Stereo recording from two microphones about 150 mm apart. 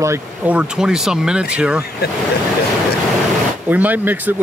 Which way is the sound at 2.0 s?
90° left.